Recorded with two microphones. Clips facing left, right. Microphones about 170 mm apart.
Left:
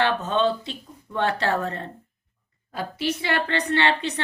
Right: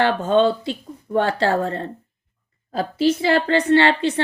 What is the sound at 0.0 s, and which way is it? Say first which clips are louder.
Speech: right 5 dB; 35° right (ahead or behind).